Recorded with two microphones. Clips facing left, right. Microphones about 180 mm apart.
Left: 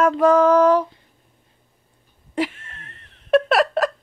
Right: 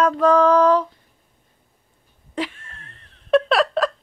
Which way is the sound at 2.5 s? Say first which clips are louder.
Left 2 dB; 70° left (ahead or behind).